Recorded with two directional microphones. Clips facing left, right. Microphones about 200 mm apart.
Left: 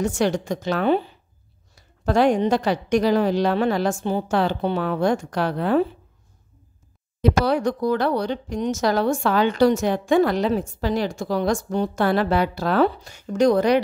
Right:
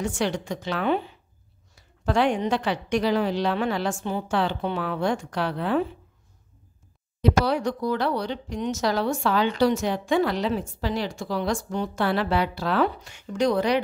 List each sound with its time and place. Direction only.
0.0 s a woman's voice: 40° left (ahead or behind)
7.2 s speech: 50° left (ahead or behind)